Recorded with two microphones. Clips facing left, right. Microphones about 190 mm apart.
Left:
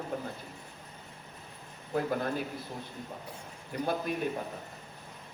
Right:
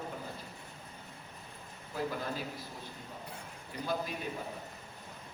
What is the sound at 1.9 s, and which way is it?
Speech, 55° left (ahead or behind).